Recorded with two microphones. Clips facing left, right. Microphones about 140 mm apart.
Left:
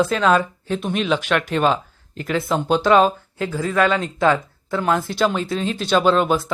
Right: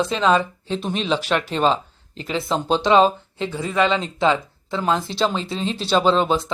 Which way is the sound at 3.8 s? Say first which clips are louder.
Left 1 dB; 25° right (ahead or behind).